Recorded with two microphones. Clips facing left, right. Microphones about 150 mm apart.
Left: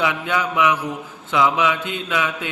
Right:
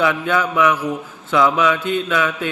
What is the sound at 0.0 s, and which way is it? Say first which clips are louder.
A man's voice: right 4 dB; 15° left (ahead or behind).